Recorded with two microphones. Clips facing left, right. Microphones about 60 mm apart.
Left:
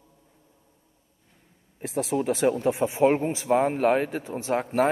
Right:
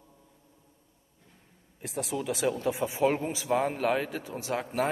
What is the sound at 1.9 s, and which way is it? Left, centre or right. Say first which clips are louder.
Speech: left 7 dB; left.